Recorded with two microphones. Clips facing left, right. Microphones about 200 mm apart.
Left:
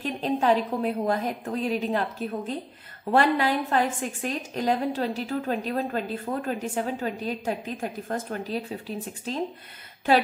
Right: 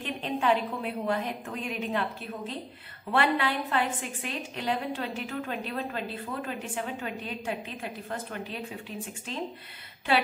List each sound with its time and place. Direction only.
0.0 s a woman's voice: 40° left (ahead or behind)